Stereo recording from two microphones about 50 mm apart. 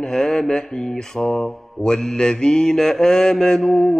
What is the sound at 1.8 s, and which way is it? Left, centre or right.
Mantra, centre.